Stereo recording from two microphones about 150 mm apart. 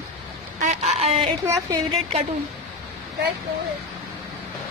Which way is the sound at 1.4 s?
20° right (ahead or behind).